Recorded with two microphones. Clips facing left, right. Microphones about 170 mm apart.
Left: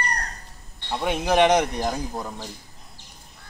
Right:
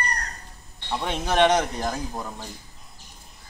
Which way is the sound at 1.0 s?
10° left (ahead or behind).